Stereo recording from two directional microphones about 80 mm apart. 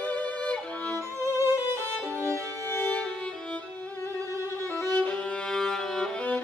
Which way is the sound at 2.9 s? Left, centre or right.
Centre.